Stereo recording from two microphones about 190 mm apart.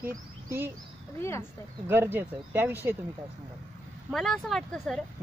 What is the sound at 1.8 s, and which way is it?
Speech, 15° right (ahead or behind).